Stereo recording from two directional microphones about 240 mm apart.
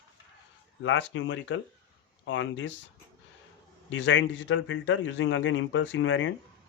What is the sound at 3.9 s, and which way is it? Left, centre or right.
Speech, left.